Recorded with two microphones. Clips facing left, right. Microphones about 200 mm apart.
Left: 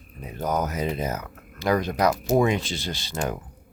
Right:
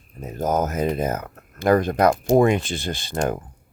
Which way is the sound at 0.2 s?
45° right (ahead or behind).